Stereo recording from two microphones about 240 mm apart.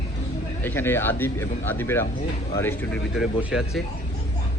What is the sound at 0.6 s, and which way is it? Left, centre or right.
Speech, centre.